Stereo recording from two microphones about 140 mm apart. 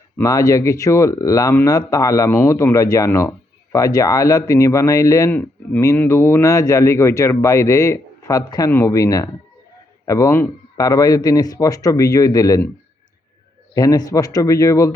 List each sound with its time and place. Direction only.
0.2 s speech: 25° left (ahead or behind)
13.7 s speech: 25° left (ahead or behind)